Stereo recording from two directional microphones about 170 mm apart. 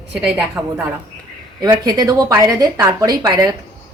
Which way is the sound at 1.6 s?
20° right (ahead or behind).